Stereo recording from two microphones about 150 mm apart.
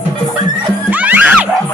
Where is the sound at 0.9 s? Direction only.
10° right (ahead or behind).